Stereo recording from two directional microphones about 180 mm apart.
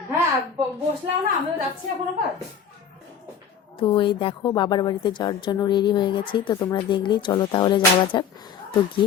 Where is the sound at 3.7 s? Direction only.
25° left (ahead or behind).